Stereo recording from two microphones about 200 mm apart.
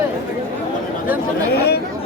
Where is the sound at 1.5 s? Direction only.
55° left (ahead or behind).